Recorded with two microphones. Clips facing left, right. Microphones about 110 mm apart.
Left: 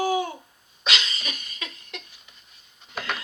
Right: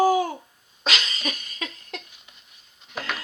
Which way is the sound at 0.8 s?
40° right (ahead or behind).